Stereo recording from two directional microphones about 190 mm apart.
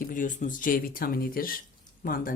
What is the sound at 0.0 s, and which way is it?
Speech, 45° left (ahead or behind).